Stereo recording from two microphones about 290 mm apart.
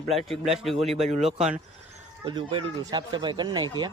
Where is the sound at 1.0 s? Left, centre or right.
Right.